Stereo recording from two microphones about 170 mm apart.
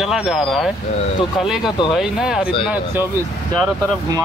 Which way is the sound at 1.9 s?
Centre (ahead or behind).